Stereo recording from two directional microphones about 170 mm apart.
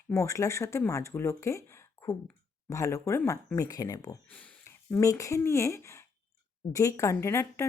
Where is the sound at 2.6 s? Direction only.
20° left (ahead or behind).